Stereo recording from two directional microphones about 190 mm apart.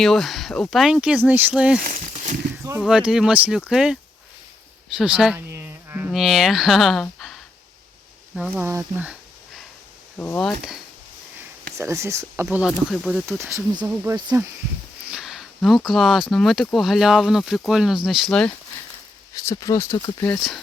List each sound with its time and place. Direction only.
0.0 s speech: centre (ahead or behind)
2.8 s speech: 5° right (ahead or behind)
4.9 s speech: 5° right (ahead or behind)
8.4 s speech: 10° right (ahead or behind)
10.2 s speech: 10° left (ahead or behind)
11.8 s speech: 15° right (ahead or behind); by 13.2 s centre (ahead or behind)
13.4 s speech: 15° right (ahead or behind)
15.1 s speech: centre (ahead or behind)
19.3 s speech: 15° left (ahead or behind)